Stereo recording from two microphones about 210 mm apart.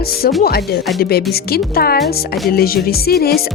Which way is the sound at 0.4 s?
50° left (ahead or behind).